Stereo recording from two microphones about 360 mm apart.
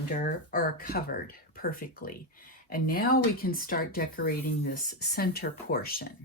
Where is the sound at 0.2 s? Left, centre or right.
Left.